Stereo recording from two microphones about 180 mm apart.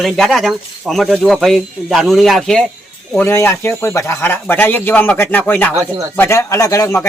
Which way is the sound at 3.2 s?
15° left (ahead or behind).